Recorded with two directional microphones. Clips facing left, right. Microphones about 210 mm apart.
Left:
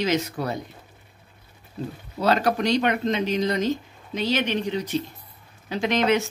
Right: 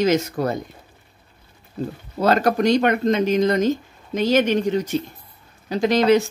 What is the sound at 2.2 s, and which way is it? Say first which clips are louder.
Speech: right 4 dB; 45° right (ahead or behind).